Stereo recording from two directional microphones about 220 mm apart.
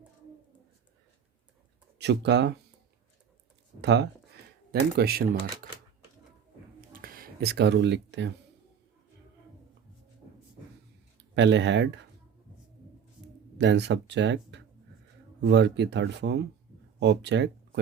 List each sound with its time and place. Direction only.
2.0 s speech: 50° right (ahead or behind)
3.8 s a sound: 50° right (ahead or behind)
4.7 s speech: 45° right (ahead or behind)
6.9 s a sound: 40° right (ahead or behind)
11.2 s speech: 55° right (ahead or behind)
13.6 s speech: 50° right (ahead or behind)